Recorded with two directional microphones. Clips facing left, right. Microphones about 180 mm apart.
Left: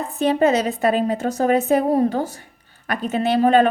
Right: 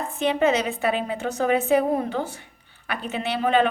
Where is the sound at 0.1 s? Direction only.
40° left (ahead or behind).